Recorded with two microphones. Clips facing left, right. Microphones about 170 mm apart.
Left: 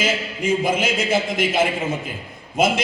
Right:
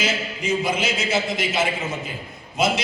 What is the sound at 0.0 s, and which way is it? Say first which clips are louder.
A man's voice: left 3 dB; 50° left (ahead or behind).